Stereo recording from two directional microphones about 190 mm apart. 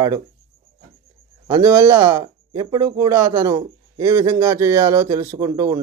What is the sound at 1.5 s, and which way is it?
Speech, 15° right (ahead or behind).